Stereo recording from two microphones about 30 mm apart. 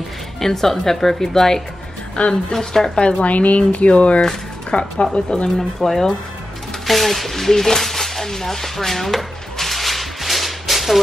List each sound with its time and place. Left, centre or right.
0.4 s speech: centre
2.2 s speech: left
2.5 s speech: centre
3.0 s speech: left
3.3 s speech: left
5.6 s speech: centre
7.8 s a sound: centre